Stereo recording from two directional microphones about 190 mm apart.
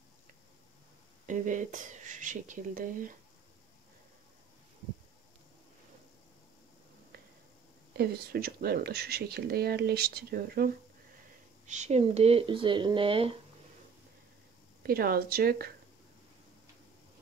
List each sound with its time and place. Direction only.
1.2 s speech: 40° right (ahead or behind)
8.0 s speech: 55° right (ahead or behind)
11.6 s speech: 40° right (ahead or behind)
14.8 s speech: 50° right (ahead or behind)